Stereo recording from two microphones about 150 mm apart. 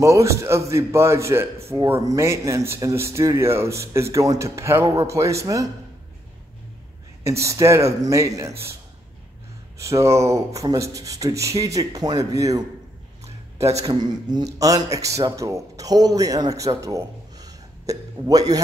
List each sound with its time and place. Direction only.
0.0 s a man's voice: 20° right (ahead or behind)
7.2 s speech: 20° right (ahead or behind)
9.8 s speech: 20° right (ahead or behind)